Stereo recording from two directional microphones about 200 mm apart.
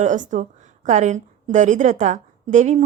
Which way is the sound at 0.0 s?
40° right (ahead or behind).